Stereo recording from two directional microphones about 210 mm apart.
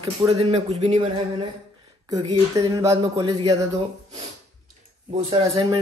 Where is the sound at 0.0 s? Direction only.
25° right (ahead or behind).